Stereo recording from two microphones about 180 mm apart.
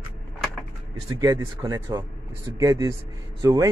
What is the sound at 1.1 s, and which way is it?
Speech, 15° right (ahead or behind).